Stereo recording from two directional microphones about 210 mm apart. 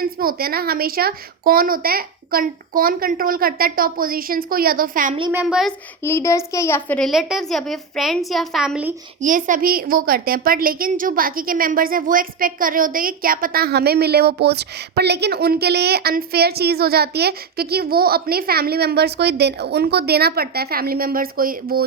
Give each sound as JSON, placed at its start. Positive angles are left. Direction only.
{"t": 0.0, "sound": "a woman's voice", "side_deg": -45}
{"t": 5.3, "sound": "a child's voice", "side_deg": -5}
{"t": 6.0, "sound": "a child's voice", "side_deg": 10}
{"t": 9.2, "sound": "a woman's voice", "side_deg": -40}